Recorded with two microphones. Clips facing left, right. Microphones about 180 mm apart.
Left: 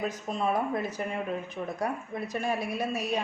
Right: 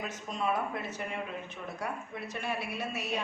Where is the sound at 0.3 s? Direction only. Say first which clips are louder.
Left 3 dB; 35° left (ahead or behind).